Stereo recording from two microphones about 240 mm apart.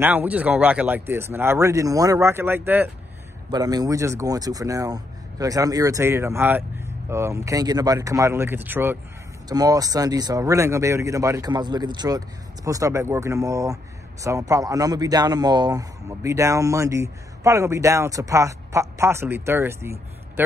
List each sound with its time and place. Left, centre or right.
0.0 s speech: centre